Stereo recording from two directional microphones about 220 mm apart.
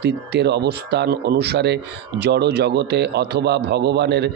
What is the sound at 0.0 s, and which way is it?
Speech, 50° right (ahead or behind).